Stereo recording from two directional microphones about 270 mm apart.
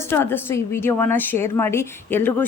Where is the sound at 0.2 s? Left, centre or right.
Centre.